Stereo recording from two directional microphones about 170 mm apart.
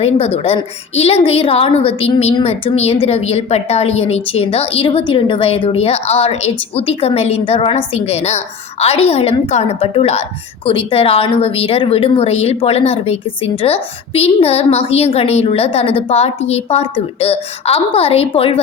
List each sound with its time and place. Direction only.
0.4 s a woman's voice: 35° left (ahead or behind)